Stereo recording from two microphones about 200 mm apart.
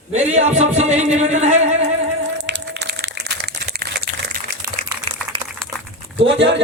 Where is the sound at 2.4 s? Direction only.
60° right (ahead or behind).